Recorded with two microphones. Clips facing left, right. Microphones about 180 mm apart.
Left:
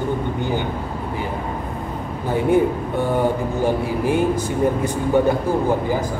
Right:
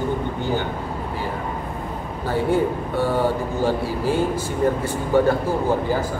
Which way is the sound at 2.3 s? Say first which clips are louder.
Left 3 dB; 15° left (ahead or behind).